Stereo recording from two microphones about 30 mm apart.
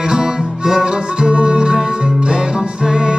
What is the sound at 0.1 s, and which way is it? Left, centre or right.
Music, centre.